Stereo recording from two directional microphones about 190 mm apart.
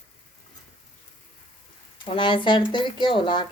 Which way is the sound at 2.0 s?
25° left (ahead or behind).